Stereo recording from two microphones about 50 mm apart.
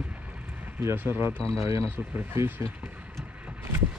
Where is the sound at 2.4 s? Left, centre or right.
Right.